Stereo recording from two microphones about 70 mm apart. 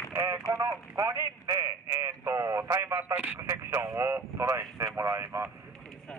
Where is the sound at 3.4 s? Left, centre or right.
Right.